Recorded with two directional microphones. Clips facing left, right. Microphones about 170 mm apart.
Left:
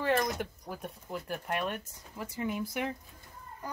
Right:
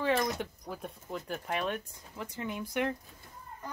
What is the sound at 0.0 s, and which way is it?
A child's voice, 5° left (ahead or behind).